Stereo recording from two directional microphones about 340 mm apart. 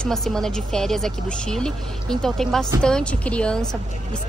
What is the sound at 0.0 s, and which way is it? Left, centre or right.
Speech, centre.